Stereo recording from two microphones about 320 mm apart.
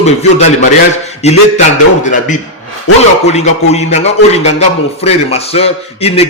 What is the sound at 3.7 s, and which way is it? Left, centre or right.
A man's voice, left.